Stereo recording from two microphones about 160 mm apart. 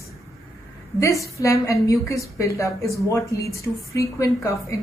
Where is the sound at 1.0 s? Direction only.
20° left (ahead or behind).